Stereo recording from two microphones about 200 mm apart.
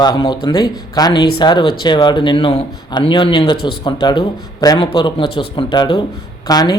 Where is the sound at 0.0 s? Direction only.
20° left (ahead or behind).